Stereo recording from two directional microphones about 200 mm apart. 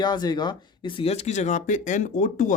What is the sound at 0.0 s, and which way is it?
Speech, 20° left (ahead or behind).